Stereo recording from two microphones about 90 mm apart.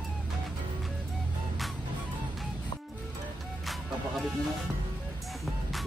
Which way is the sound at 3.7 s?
Centre (ahead or behind).